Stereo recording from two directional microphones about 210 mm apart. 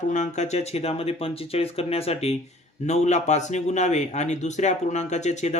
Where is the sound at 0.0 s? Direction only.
35° left (ahead or behind).